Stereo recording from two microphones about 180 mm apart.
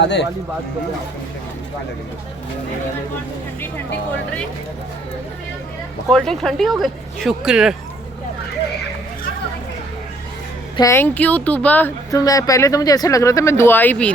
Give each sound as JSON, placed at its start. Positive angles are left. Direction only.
{"t": 0.0, "sound": "speech", "side_deg": 75}
{"t": 6.1, "sound": "speech", "side_deg": 0}
{"t": 10.8, "sound": "speech", "side_deg": 15}